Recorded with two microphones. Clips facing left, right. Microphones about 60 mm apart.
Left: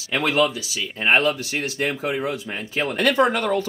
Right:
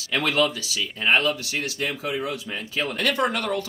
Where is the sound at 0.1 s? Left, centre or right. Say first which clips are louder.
Left 2 dB; centre.